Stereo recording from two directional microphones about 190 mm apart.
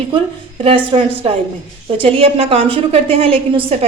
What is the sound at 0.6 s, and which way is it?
A woman's voice, 30° right (ahead or behind).